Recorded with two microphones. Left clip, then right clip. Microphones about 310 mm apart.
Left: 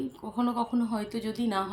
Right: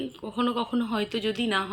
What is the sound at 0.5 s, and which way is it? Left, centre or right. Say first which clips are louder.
Speech: right 2 dB; centre.